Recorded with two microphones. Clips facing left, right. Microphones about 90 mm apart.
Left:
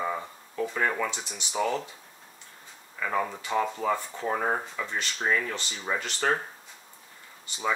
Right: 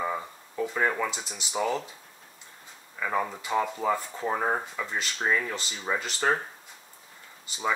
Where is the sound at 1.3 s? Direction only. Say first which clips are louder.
Left 1 dB; 5° right (ahead or behind).